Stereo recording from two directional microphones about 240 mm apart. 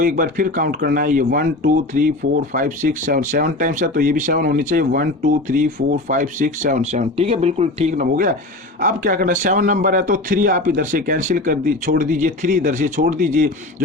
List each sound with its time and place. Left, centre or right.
0.0 s a man's voice: right